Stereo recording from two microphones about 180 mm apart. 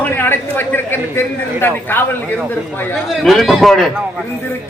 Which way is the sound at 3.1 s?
Centre (ahead or behind).